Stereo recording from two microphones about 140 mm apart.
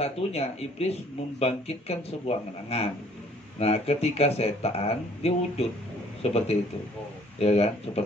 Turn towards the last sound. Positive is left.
turn(degrees=45)  # may be behind; listen again after turning